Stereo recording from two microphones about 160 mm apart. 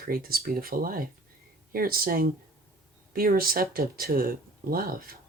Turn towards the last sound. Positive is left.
turn(degrees=-65)  # may be behind; listen again after turning